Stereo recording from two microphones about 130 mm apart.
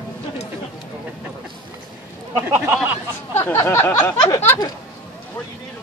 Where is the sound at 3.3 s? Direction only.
20° left (ahead or behind).